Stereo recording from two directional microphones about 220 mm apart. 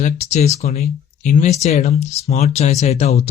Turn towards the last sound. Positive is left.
turn(degrees=30)  # may be behind; listen again after turning